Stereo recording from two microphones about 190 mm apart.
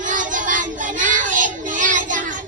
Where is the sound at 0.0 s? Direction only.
40° right (ahead or behind).